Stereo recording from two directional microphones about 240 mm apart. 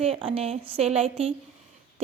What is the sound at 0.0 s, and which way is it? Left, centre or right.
A woman's voice, right.